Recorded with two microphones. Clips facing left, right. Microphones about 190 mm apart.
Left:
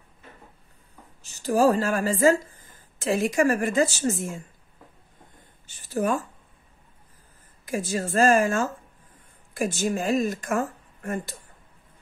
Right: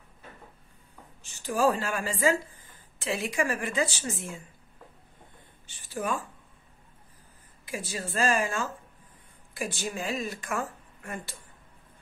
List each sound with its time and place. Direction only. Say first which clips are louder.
1.2 s a woman's voice: left 5 dB; 40° left (ahead or behind)
5.7 s speech: left 7 dB; 40° left (ahead or behind)
7.6 s speech: left 8 dB; 45° left (ahead or behind)